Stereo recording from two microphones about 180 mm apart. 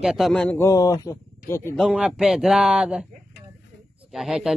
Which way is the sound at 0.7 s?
20° left (ahead or behind).